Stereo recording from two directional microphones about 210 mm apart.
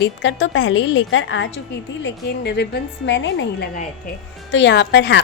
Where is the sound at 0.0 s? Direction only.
60° left (ahead or behind).